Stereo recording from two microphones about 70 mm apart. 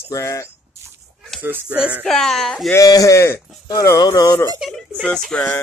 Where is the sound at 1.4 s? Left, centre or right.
Right.